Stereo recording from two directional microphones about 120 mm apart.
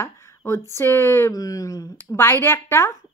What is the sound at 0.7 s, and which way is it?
Speech, 20° left (ahead or behind).